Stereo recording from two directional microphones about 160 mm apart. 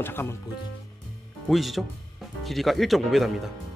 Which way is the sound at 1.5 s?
Centre (ahead or behind).